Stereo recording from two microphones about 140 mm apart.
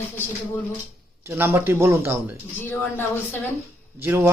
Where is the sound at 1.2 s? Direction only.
15° right (ahead or behind).